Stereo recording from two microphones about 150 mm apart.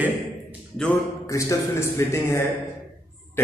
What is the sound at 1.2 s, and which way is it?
A man's voice, 20° left (ahead or behind).